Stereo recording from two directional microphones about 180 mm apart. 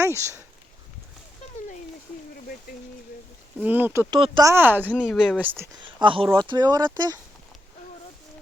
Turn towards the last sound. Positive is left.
turn(degrees=-20)  # may be behind; listen again after turning